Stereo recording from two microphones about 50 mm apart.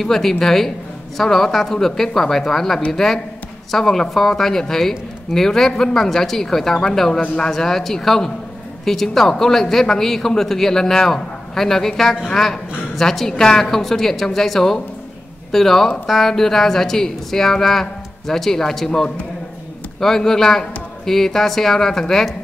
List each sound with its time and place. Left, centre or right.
0.0 s a woman's voice: centre